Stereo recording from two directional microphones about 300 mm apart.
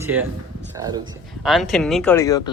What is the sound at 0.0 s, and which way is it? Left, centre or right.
Speech, centre.